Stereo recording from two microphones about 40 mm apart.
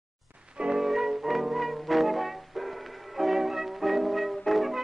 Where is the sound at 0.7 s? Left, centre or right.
Centre.